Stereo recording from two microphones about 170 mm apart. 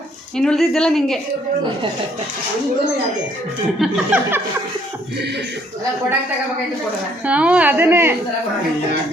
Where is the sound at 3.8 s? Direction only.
5° right (ahead or behind).